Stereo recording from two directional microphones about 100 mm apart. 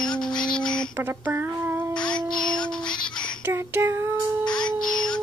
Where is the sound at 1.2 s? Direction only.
20° right (ahead or behind).